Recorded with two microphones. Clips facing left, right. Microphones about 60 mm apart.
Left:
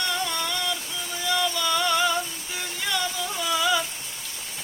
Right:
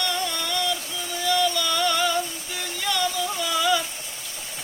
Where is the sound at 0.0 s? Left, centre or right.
Centre.